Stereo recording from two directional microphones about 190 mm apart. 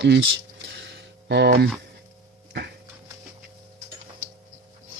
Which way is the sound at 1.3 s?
60° right (ahead or behind).